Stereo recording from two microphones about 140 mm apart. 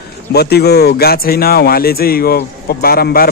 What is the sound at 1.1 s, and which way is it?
A man's voice, 90° left.